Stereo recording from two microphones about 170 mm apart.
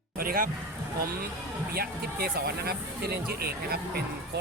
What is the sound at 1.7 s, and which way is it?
Speech, 65° right (ahead or behind).